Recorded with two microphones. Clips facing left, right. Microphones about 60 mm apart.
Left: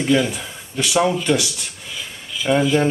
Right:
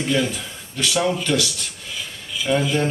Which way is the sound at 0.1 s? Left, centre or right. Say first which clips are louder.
Left 5 dB; centre.